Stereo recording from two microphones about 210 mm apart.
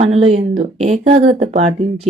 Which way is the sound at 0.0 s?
30° right (ahead or behind).